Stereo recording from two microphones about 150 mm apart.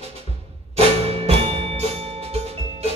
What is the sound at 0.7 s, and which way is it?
Music, 40° right (ahead or behind).